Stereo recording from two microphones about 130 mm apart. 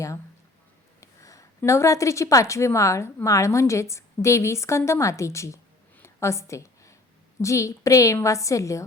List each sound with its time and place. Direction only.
1.0 s a woman's voice: 25° left (ahead or behind)
6.0 s a sound: 20° left (ahead or behind)
7.4 s a woman's voice: 25° left (ahead or behind)